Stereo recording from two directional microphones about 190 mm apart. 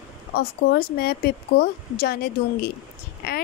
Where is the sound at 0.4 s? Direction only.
55° left (ahead or behind).